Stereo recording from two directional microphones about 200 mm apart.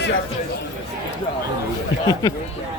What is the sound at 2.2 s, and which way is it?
Speech, 15° left (ahead or behind).